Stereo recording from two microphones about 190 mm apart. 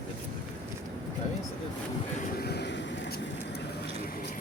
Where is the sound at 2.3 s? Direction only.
60° left (ahead or behind).